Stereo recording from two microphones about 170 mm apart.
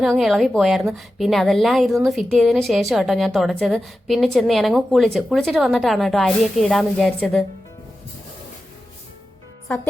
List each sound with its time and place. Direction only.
0.0 s a woman's voice: centre (ahead or behind)